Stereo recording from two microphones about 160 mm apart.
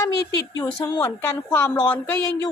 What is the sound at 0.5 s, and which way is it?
A woman's voice, 20° left (ahead or behind).